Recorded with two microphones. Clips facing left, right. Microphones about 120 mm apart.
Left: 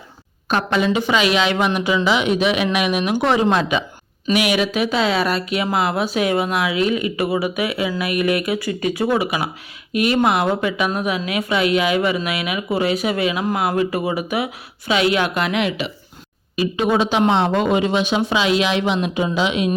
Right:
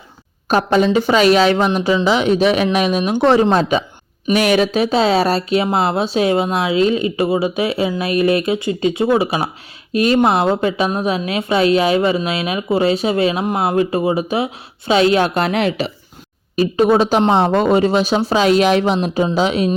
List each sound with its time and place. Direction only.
0.4 s a woman's voice: 40° right (ahead or behind)